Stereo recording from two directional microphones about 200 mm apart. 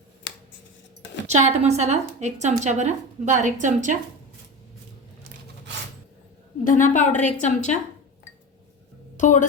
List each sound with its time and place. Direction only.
1.3 s a woman's voice: 35° right (ahead or behind)
6.7 s a woman's voice: 40° left (ahead or behind)
9.1 s a woman's voice: 35° left (ahead or behind)